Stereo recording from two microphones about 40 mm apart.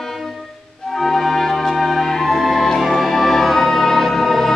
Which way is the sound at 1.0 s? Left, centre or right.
Centre.